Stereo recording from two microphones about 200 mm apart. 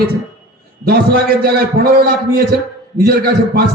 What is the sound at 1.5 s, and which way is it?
A man's voice, 50° right (ahead or behind).